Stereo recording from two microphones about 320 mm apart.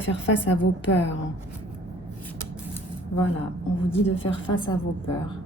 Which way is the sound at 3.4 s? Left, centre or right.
Centre.